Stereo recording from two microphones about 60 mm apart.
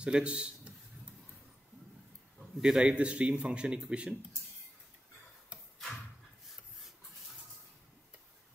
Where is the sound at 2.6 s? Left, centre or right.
Centre.